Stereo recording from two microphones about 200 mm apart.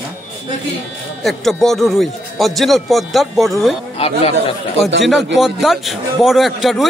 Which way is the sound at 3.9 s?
30° left (ahead or behind).